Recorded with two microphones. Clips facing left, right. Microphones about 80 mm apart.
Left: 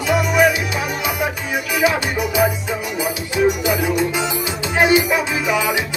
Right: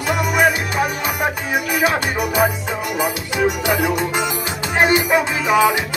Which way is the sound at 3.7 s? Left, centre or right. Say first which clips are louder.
Even; right.